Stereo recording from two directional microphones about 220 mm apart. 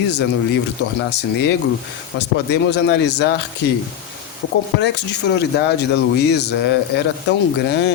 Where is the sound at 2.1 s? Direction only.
50° left (ahead or behind).